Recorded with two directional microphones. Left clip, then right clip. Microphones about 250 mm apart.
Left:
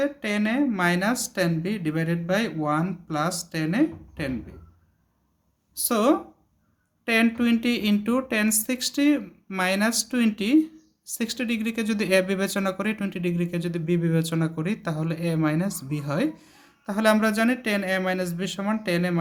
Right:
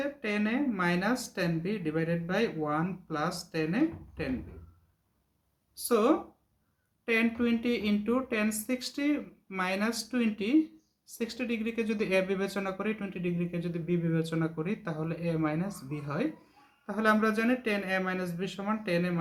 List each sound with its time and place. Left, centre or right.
0.0 s speech: left
5.7 s speech: left